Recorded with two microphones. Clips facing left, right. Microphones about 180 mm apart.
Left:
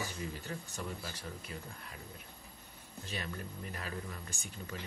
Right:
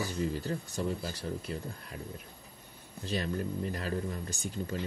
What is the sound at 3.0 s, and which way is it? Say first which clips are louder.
Speech: right 9 dB; 35° right (ahead or behind).